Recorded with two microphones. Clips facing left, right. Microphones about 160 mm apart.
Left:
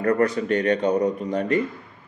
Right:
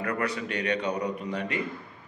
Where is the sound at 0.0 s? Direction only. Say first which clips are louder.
Left 9 dB; 45° left (ahead or behind).